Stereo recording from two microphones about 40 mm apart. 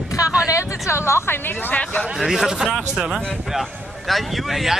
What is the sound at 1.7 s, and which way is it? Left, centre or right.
Speech, left.